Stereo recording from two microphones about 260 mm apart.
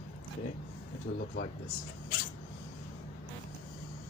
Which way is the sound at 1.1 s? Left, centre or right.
Left.